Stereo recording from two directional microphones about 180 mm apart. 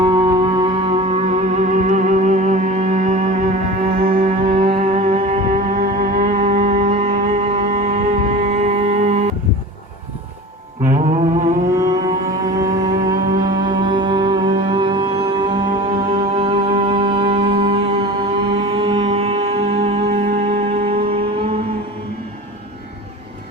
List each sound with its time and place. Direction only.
0.0 s music: 25° right (ahead or behind)
10.9 s mantra: 40° right (ahead or behind)
11.7 s a sound: 20° right (ahead or behind)
12.5 s music: 20° right (ahead or behind)